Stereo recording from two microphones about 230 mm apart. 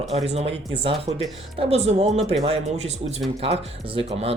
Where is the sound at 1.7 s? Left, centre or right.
Right.